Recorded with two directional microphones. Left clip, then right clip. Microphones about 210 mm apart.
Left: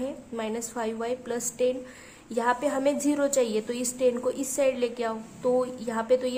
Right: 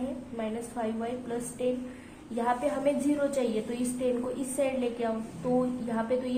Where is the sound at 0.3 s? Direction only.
40° left (ahead or behind).